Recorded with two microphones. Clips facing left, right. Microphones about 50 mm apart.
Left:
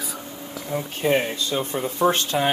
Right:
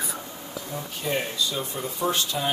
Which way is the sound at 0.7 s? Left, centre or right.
Left.